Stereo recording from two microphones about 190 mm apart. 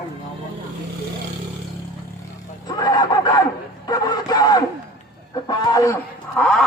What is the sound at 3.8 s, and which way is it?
Music, 20° left (ahead or behind).